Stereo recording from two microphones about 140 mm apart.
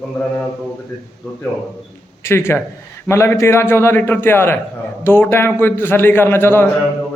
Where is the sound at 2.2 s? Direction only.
15° left (ahead or behind).